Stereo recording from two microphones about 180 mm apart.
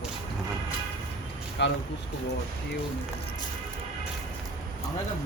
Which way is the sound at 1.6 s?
75° left (ahead or behind).